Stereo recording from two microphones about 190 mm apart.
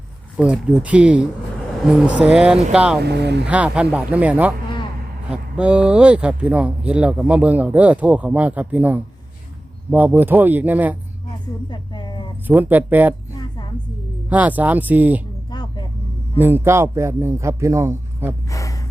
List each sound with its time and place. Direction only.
0.3 s speech: 5° right (ahead or behind)
3.0 s speech: 60° right (ahead or behind)
3.4 s speech: 5° right (ahead or behind)
11.7 s a sound: 25° left (ahead or behind)
12.5 s speech: 10° right (ahead or behind)
14.3 s speech: 10° right (ahead or behind)
15.5 s vehicle: 20° left (ahead or behind)
16.4 s speech: 10° right (ahead or behind)
18.5 s a sound: 15° left (ahead or behind)